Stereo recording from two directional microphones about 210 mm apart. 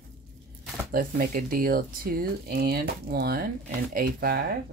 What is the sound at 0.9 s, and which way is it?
Speech, 40° right (ahead or behind).